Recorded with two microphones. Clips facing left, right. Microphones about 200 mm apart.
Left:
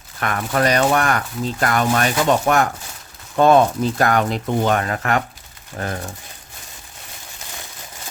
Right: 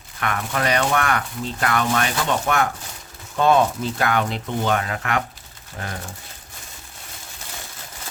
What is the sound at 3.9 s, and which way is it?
Speech, 45° left (ahead or behind).